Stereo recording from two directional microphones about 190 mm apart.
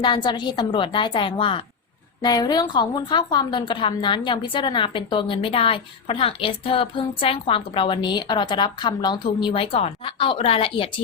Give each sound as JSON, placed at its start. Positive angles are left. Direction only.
{"t": 0.0, "sound": "a woman's voice", "side_deg": 25}